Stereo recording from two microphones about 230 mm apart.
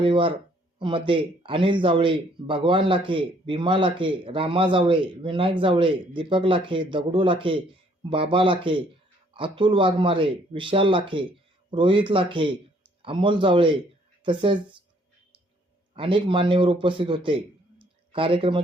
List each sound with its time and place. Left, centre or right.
0.0 s speech: right
16.0 s a man's voice: right